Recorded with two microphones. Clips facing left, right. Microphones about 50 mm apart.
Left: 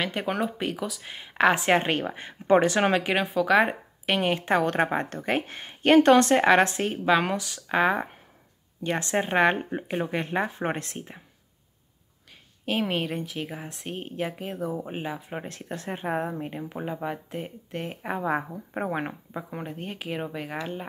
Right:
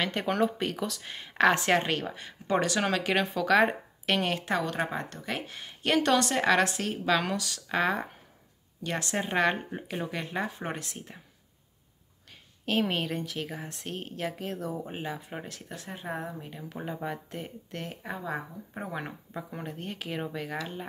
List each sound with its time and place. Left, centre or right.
0.0 s speech: centre; by 3.0 s left
3.0 s speech: centre
4.4 s a woman's voice: left
12.6 s speech: centre
15.4 s speech: left
16.6 s a woman's voice: centre; by 19.1 s left
19.3 s speech: centre